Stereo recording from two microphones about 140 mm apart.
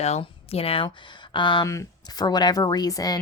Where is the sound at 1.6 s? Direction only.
20° left (ahead or behind).